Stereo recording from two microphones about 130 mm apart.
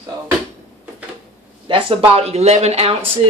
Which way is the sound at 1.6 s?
45° right (ahead or behind).